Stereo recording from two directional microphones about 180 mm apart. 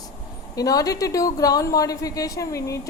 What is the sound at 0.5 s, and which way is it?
A woman's voice, 20° left (ahead or behind).